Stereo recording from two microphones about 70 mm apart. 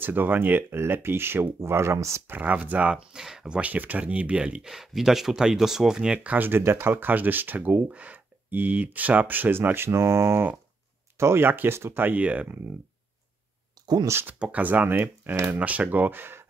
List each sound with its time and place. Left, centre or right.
0.0 s speech: right
2.3 s speech: right
6.1 s speech: right
11.4 s speech: right
13.8 s a sound: right
14.2 s speech: right